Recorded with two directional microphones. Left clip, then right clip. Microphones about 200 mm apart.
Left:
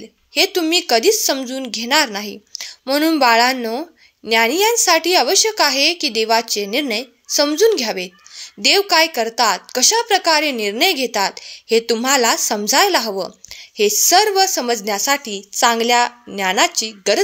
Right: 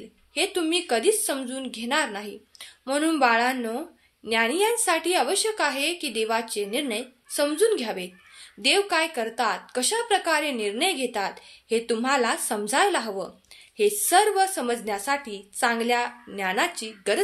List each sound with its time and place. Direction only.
0.3 s a woman's voice: 40° left (ahead or behind)